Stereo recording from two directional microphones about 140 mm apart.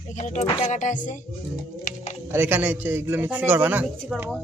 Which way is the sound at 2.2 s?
15° right (ahead or behind).